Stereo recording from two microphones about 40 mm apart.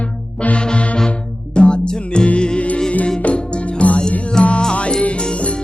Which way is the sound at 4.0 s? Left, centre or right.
Centre.